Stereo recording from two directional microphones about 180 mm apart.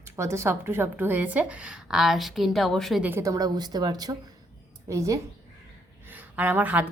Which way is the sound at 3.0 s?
15° right (ahead or behind).